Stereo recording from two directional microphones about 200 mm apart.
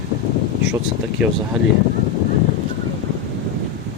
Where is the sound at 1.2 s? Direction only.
5° right (ahead or behind).